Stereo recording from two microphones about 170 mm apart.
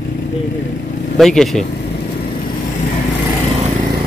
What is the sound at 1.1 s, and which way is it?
Speech, centre (ahead or behind).